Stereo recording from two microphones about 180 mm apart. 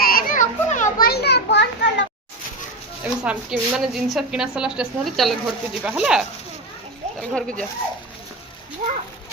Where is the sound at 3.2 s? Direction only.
5° right (ahead or behind).